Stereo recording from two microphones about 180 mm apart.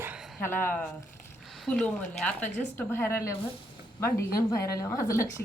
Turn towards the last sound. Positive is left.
turn(degrees=15)  # may be behind; listen again after turning